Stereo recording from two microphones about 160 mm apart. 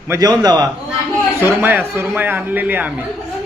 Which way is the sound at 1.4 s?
10° right (ahead or behind).